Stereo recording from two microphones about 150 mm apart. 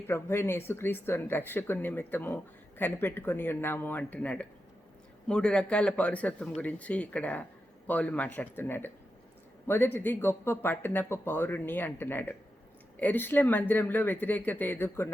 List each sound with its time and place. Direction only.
0.1 s speech: 15° left (ahead or behind)